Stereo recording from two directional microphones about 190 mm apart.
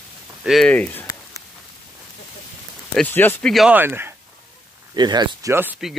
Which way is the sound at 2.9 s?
5° left (ahead or behind).